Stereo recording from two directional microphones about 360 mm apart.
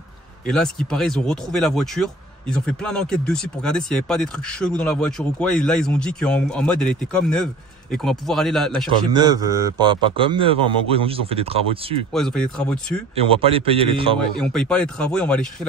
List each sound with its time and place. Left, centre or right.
0.5 s speech: centre
9.1 s a man's voice: centre
12.1 s speech: centre
13.3 s a man's voice: centre
14.4 s speech: centre